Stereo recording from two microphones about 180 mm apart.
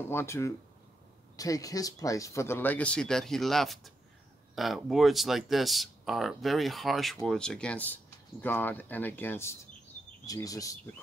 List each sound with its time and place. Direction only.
0.1 s speech: 15° left (ahead or behind)